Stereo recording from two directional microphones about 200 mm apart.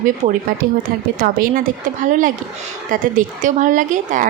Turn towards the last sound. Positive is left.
turn(degrees=-40)  # may be behind; listen again after turning